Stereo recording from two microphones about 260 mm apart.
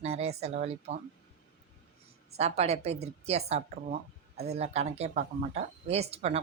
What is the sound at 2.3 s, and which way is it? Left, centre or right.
Speech, right.